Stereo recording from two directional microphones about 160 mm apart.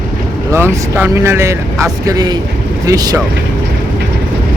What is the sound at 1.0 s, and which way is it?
Speech, 15° right (ahead or behind).